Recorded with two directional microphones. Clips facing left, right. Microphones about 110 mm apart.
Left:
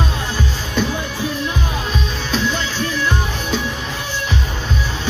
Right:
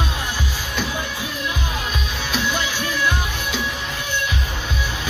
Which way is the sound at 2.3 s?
10° right (ahead or behind).